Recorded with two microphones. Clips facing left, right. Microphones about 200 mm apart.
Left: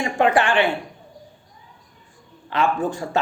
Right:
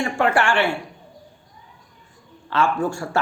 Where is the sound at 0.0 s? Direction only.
20° left (ahead or behind).